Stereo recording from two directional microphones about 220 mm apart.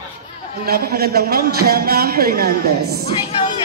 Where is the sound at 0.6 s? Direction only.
45° right (ahead or behind).